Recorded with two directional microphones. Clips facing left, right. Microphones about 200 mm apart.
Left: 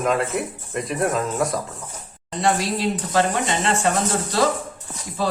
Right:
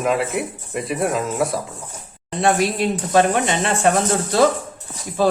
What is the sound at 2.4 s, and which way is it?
Speech, 60° right (ahead or behind).